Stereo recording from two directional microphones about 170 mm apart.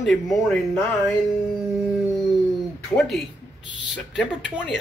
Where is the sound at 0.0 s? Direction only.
5° left (ahead or behind).